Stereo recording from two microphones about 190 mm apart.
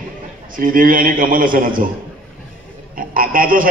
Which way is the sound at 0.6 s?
45° right (ahead or behind).